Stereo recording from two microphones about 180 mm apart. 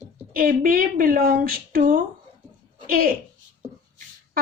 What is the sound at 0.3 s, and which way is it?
Speech, 50° right (ahead or behind).